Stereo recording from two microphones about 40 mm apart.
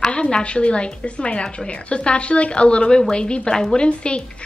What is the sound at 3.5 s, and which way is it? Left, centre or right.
Speech, centre.